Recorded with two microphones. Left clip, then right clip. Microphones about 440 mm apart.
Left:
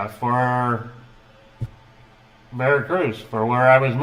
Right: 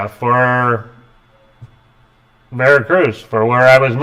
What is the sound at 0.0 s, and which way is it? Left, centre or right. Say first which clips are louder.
Speech: right 7 dB; right.